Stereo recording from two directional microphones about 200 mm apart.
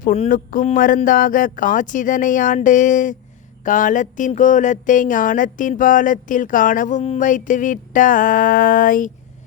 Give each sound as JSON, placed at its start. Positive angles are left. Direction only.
{"t": 0.3, "sound": "speech", "side_deg": 45}